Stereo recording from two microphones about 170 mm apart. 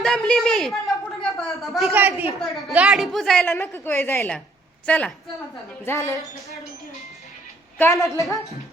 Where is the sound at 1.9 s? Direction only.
10° right (ahead or behind); by 6.1 s 15° left (ahead or behind).